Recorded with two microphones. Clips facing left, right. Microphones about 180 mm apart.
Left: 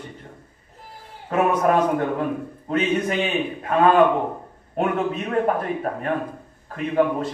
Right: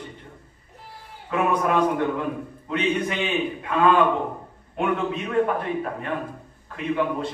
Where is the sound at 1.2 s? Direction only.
45° left (ahead or behind).